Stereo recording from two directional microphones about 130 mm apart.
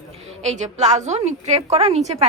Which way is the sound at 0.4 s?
60° right (ahead or behind).